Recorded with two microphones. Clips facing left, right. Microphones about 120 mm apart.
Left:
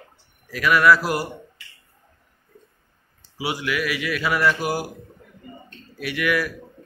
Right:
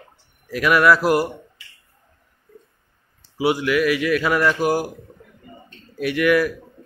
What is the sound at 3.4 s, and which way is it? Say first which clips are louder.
Speech: right 8 dB; 50° right (ahead or behind).